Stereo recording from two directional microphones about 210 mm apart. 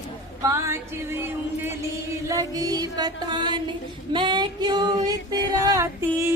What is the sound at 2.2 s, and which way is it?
Music, 15° right (ahead or behind).